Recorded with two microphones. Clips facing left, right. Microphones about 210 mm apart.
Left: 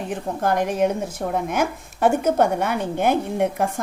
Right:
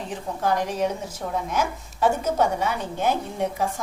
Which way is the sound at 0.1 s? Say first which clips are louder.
Left 2 dB; 55° left (ahead or behind).